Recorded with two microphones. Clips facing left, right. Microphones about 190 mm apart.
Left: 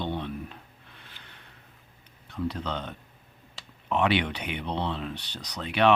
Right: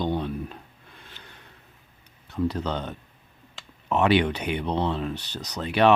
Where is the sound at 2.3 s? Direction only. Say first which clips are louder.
Right 5 dB; 40° right (ahead or behind).